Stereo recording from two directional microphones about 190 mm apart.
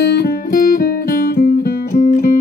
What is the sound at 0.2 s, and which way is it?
Music, 50° left (ahead or behind).